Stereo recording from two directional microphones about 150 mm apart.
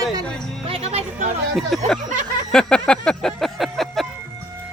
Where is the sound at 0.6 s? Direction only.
40° right (ahead or behind).